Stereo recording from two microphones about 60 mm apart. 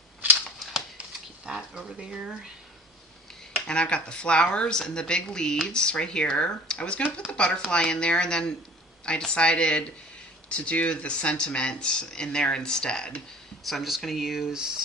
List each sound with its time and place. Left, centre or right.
0.2 s typewriter: right
1.5 s speech: centre
3.7 s speech: centre
13.7 s speech: centre